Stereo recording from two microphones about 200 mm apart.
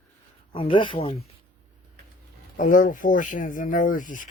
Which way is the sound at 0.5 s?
25° left (ahead or behind).